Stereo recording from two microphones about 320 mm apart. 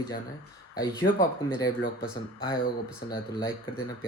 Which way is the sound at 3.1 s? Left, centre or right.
Centre.